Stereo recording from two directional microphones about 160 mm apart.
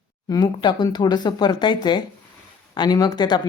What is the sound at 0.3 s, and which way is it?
Speech, 25° left (ahead or behind).